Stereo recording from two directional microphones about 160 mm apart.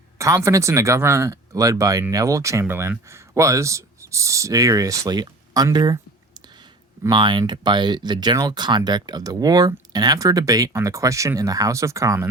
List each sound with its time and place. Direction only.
0.2 s speech: 20° right (ahead or behind)